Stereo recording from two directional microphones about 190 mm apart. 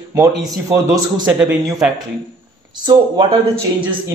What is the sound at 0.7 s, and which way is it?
A man's voice, 15° right (ahead or behind).